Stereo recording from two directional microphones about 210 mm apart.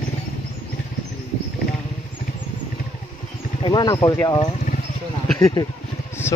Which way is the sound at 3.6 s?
20° left (ahead or behind).